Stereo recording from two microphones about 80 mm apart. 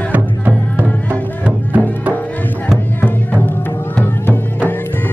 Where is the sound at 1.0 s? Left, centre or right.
Centre.